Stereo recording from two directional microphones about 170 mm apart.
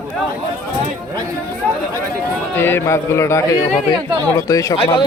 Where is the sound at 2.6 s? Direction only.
15° left (ahead or behind).